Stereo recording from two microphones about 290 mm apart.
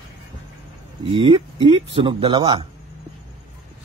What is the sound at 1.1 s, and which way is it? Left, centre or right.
Speech, centre.